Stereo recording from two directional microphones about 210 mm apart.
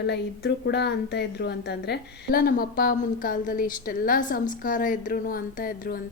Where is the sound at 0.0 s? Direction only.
55° left (ahead or behind).